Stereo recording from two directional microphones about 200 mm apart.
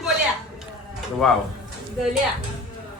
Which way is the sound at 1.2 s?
Centre (ahead or behind).